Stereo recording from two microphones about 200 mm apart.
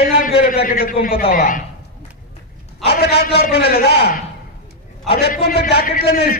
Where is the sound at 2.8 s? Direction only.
55° left (ahead or behind).